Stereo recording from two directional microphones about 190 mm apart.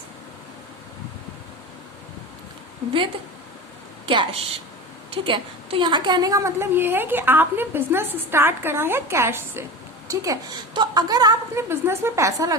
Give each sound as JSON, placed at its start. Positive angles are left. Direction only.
{"t": 4.0, "sound": "a woman's voice", "side_deg": -25}